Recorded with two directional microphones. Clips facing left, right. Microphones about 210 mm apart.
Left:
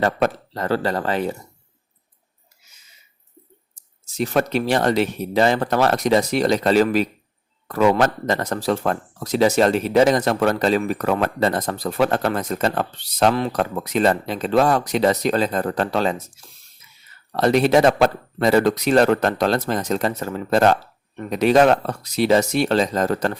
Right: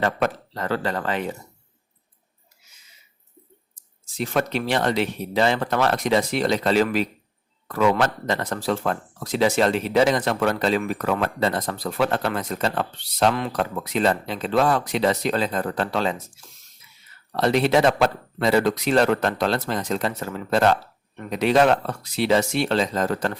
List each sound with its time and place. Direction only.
0.0 s speech: 40° left (ahead or behind)
4.1 s speech: 40° left (ahead or behind)
17.3 s speech: 45° left (ahead or behind)